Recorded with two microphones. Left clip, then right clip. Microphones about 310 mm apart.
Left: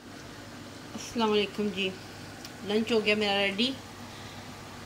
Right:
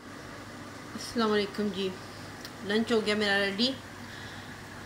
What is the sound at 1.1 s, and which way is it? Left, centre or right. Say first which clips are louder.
Speech: left 1 dB; centre.